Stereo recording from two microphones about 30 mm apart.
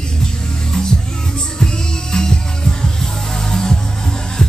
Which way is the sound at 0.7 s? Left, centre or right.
Left.